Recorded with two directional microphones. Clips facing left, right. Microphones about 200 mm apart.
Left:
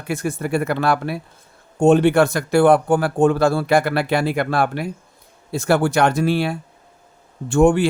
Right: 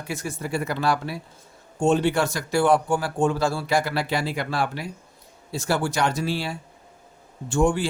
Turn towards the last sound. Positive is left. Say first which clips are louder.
# left 7 dB
turn(degrees=60)  # may be behind; listen again after turning